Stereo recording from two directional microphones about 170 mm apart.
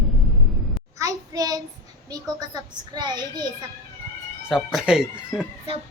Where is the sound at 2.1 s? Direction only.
20° right (ahead or behind).